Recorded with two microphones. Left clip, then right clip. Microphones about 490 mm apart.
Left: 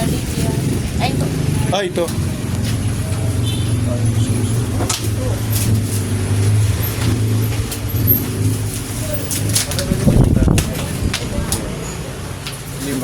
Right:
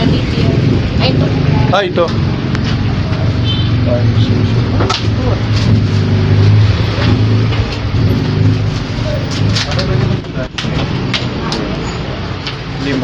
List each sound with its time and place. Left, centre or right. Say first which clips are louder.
1.7 s speech: right 6 dB; left